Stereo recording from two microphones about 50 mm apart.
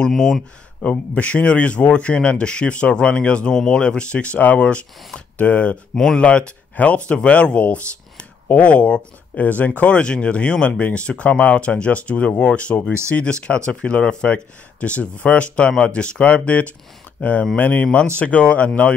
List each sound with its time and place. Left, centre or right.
0.1 s speech: centre
0.8 s speech: left